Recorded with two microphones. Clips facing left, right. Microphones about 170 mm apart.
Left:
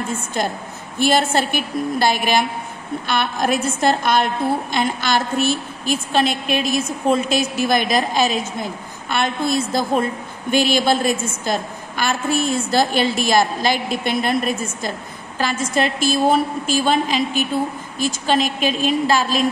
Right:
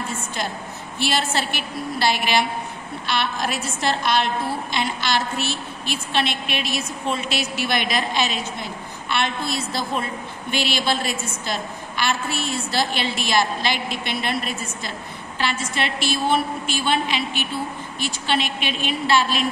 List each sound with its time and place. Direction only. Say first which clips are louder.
0.4 s a woman's voice: left 5 dB; 50° left (ahead or behind)